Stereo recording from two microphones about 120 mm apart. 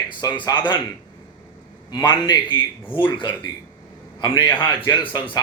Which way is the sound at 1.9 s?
35° left (ahead or behind).